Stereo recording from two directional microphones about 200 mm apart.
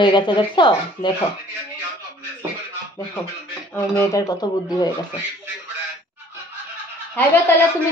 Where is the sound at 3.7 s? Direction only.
10° left (ahead or behind).